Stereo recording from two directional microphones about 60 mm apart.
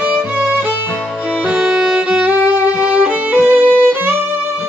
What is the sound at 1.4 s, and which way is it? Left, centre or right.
Music, right.